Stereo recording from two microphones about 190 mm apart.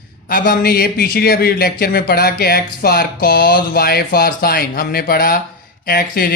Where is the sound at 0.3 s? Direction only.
50° left (ahead or behind).